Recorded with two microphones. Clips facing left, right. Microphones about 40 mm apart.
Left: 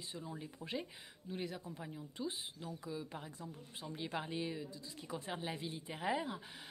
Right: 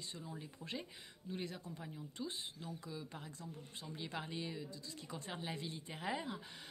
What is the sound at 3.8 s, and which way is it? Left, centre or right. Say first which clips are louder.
Speech: left 4 dB; centre.